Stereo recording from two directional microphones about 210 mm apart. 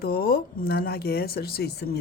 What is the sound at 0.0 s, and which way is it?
Speech, 45° left (ahead or behind).